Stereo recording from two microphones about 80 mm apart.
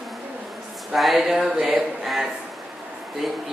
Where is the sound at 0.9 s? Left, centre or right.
Centre.